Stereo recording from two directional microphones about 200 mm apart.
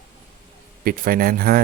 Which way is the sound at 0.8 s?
45° right (ahead or behind).